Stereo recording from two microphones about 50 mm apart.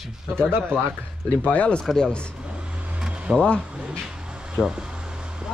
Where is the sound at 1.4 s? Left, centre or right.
Left.